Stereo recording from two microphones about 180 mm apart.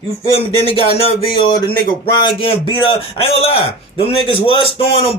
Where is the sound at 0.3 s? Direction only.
35° left (ahead or behind).